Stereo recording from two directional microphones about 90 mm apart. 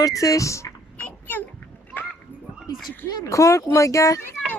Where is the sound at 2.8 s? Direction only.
40° left (ahead or behind).